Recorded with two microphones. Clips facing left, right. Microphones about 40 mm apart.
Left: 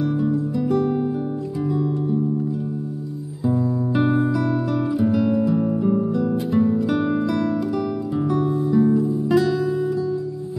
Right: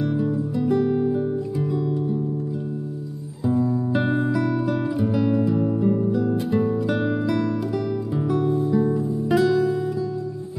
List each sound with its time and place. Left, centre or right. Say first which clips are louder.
0.0 s music: left 2 dB; centre
3.4 s music: even; centre